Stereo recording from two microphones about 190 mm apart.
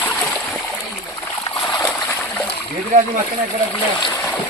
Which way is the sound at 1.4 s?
25° left (ahead or behind).